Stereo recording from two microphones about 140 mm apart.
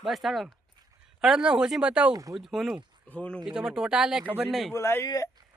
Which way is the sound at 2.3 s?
Centre (ahead or behind).